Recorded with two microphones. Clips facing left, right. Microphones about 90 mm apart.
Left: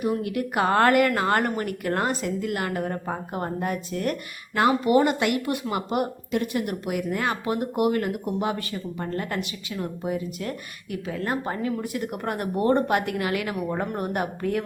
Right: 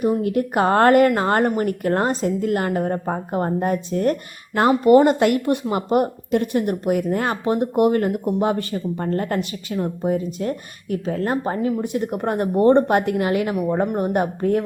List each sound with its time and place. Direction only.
0.0 s a woman's voice: 35° right (ahead or behind)